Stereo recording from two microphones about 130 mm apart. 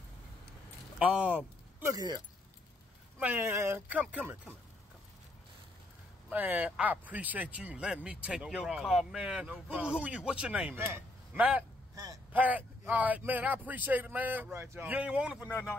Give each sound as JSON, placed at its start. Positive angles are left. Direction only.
{"t": 0.9, "sound": "speech", "side_deg": -10}
{"t": 1.9, "sound": "speech", "side_deg": -30}
{"t": 3.2, "sound": "speech", "side_deg": -15}
{"t": 6.3, "sound": "speech", "side_deg": -10}
{"t": 11.9, "sound": "a sound", "side_deg": -30}
{"t": 12.3, "sound": "speech", "side_deg": -10}